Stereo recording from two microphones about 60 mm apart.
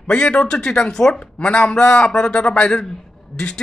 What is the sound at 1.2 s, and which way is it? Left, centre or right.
Speech, left.